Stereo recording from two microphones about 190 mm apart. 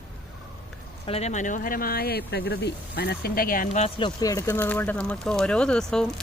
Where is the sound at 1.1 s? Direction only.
35° left (ahead or behind).